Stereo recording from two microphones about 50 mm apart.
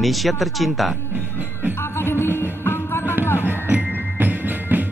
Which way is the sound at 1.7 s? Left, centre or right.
Left.